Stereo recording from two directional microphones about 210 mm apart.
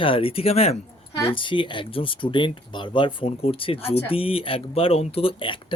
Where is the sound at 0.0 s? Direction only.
25° left (ahead or behind).